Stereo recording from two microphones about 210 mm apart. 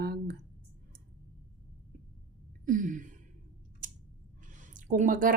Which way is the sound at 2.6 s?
40° right (ahead or behind).